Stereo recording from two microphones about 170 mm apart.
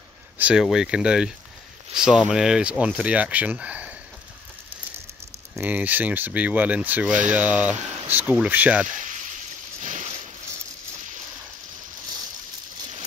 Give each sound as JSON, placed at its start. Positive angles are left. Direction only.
{"t": 0.4, "sound": "speech", "side_deg": -5}
{"t": 5.6, "sound": "speech", "side_deg": -10}
{"t": 8.8, "sound": "speech", "side_deg": -50}
{"t": 9.8, "sound": "boat", "side_deg": -45}